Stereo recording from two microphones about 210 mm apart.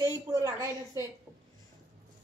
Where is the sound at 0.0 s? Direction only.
15° right (ahead or behind).